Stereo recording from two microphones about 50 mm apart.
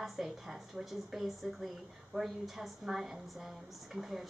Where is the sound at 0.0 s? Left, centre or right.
Centre.